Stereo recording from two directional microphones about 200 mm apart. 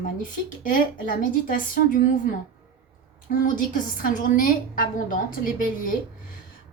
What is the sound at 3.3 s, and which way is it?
A woman's voice, 40° left (ahead or behind).